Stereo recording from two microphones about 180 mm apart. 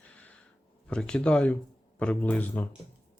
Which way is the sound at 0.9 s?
5° left (ahead or behind).